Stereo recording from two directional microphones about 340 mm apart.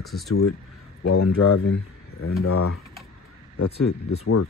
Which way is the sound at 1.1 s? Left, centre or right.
Left.